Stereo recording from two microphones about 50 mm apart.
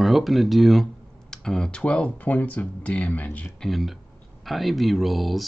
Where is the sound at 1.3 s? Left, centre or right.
Centre; by 3.5 s left.